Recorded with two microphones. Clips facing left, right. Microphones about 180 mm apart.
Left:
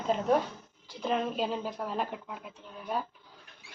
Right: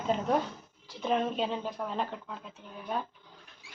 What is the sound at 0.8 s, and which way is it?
Speech, centre (ahead or behind).